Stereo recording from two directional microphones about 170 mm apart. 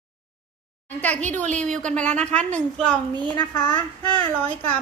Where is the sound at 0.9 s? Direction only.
10° left (ahead or behind).